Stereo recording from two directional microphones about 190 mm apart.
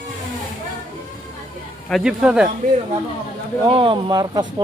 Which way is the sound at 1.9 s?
5° right (ahead or behind).